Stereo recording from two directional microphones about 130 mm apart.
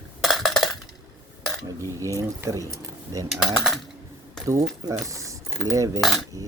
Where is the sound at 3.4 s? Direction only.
Centre (ahead or behind).